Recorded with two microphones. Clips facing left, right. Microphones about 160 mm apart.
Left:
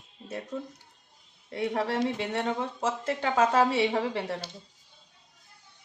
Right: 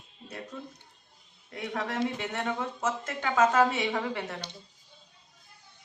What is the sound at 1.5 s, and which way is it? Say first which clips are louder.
Speech: left 5 dB; 30° left (ahead or behind).